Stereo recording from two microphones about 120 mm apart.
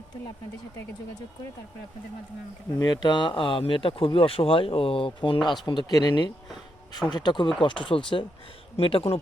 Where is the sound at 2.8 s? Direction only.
35° left (ahead or behind).